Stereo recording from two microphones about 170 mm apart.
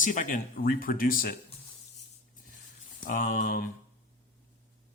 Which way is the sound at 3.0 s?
50° left (ahead or behind).